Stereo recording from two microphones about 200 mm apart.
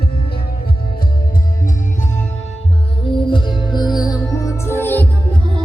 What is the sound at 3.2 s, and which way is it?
Music, 25° left (ahead or behind).